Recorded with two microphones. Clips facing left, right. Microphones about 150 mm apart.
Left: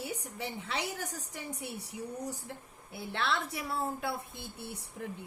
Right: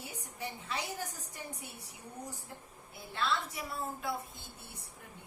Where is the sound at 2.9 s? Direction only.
70° left (ahead or behind).